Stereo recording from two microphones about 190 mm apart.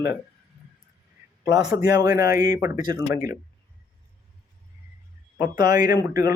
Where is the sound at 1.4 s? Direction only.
15° right (ahead or behind).